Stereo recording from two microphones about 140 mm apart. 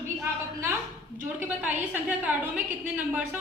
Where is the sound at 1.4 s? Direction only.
10° right (ahead or behind).